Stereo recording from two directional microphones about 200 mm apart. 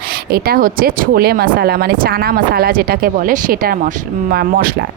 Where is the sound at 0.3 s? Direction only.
50° right (ahead or behind).